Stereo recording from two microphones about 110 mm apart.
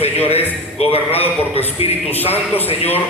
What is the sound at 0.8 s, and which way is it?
A man's voice, 65° left (ahead or behind).